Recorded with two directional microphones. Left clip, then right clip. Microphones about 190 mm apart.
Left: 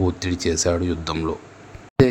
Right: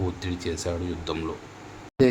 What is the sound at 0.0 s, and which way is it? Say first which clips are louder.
Speech: left 8 dB; 35° left (ahead or behind).